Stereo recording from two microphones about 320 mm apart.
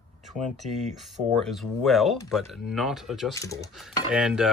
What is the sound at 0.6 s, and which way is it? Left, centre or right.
Speech, right.